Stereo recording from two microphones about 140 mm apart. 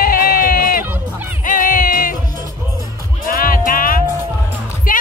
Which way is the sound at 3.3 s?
90° left.